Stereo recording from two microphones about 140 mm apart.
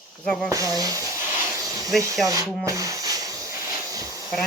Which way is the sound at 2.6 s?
25° right (ahead or behind).